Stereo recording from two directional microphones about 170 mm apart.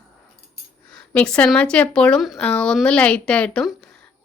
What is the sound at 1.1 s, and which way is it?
Speech, 5° left (ahead or behind).